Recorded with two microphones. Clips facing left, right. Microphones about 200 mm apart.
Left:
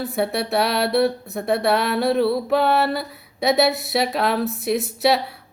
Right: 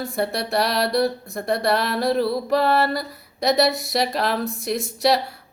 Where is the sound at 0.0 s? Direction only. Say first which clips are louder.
Left 2 dB; centre (ahead or behind).